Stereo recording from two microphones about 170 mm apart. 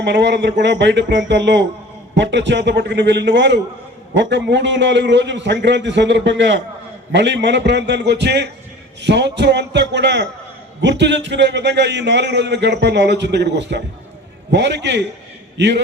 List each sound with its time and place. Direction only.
0.0 s a man's voice: 90° right
9.0 s a man's voice: 90° right